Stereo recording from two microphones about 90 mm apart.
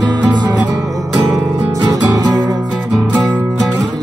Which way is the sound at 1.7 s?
40° right (ahead or behind).